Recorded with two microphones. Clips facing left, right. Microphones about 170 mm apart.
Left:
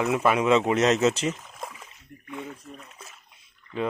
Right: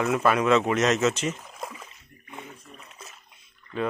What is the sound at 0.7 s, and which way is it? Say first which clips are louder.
Speech: left 2 dB; 30° left (ahead or behind).